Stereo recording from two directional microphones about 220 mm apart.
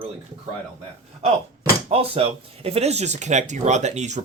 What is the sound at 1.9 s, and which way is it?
Speech, 25° right (ahead or behind).